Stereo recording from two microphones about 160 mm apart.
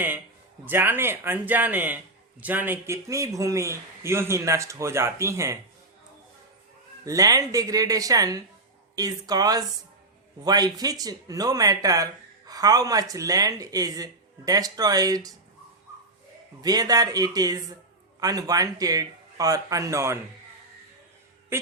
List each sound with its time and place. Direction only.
0.6 s a man's voice: 15° right (ahead or behind)
7.0 s speech: 20° right (ahead or behind)
16.6 s speech: 25° right (ahead or behind)